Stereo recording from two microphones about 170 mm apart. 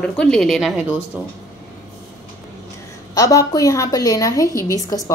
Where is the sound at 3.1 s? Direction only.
20° left (ahead or behind).